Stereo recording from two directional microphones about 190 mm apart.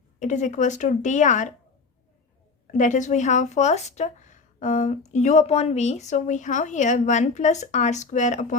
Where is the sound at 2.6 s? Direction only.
40° left (ahead or behind).